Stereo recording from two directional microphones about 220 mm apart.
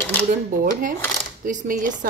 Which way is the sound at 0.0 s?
10° left (ahead or behind).